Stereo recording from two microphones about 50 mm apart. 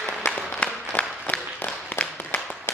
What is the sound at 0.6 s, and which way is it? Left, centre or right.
Applause, left.